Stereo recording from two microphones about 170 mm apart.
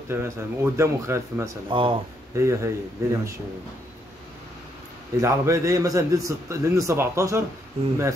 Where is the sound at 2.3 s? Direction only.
15° right (ahead or behind).